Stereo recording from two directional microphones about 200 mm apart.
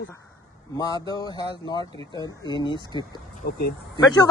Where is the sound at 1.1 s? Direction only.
20° left (ahead or behind).